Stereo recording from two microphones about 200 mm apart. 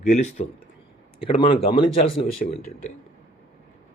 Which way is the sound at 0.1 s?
35° left (ahead or behind).